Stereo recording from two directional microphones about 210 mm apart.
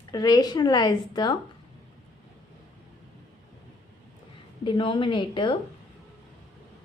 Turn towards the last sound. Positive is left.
turn(degrees=25)  # may be behind; listen again after turning